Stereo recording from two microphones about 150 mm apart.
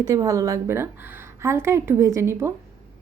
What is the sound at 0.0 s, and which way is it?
A woman's voice, 25° right (ahead or behind).